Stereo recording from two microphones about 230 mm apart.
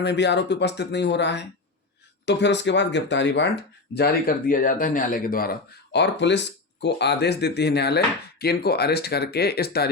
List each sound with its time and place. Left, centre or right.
0.0 s speech: left